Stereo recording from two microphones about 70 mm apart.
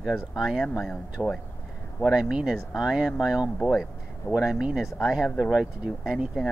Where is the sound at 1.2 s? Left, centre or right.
Centre.